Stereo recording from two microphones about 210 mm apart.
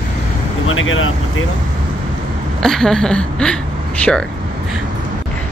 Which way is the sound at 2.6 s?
Centre (ahead or behind).